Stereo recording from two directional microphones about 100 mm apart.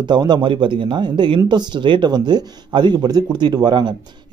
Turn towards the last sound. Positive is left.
turn(degrees=-45)  # may be behind; listen again after turning